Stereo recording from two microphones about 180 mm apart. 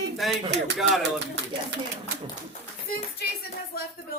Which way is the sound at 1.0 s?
75° right (ahead or behind).